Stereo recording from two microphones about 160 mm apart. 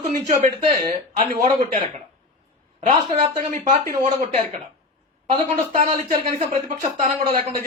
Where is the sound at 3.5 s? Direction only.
55° right (ahead or behind).